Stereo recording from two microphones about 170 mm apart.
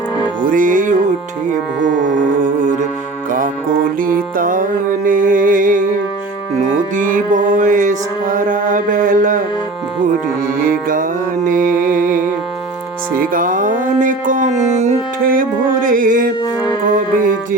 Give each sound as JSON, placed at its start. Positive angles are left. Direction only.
{"t": 0.4, "sound": "music", "side_deg": -50}
{"t": 1.8, "sound": "music", "side_deg": -90}
{"t": 2.4, "sound": "music", "side_deg": -50}
{"t": 4.0, "sound": "music", "side_deg": -55}
{"t": 10.6, "sound": "music", "side_deg": -55}
{"t": 11.4, "sound": "mantra", "side_deg": -50}
{"t": 13.1, "sound": "music", "side_deg": -55}